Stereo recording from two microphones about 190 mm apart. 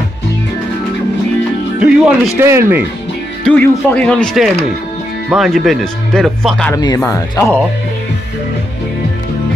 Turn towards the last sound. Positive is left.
turn(degrees=15)  # may be behind; listen again after turning